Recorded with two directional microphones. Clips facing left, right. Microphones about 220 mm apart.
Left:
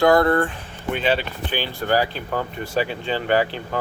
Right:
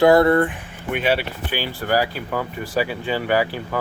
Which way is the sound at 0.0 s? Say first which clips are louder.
Right 3 dB; 25° right (ahead or behind).